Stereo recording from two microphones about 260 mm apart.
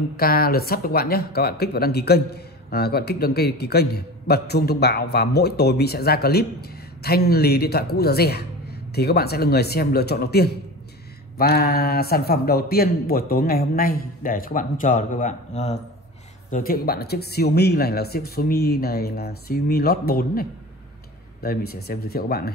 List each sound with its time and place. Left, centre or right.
0.2 s speech: left